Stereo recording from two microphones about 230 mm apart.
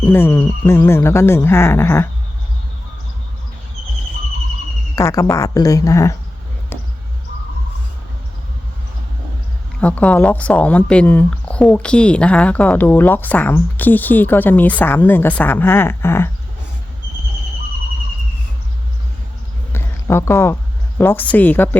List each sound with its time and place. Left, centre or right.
0.0 s speech: centre
4.9 s speech: centre
9.8 s speech: centre
19.7 s a sound: centre
21.0 s speech: centre